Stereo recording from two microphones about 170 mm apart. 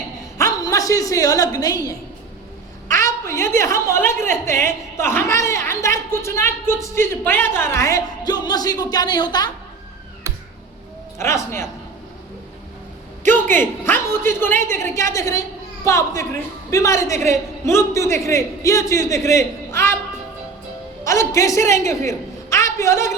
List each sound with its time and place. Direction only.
0.3 s a woman's voice: 20° left (ahead or behind)
3.0 s a woman's voice: 15° left (ahead or behind)
11.2 s a woman's voice: 15° left (ahead or behind)
13.6 s a woman's voice: 15° left (ahead or behind)
21.0 s a man's voice: 20° left (ahead or behind)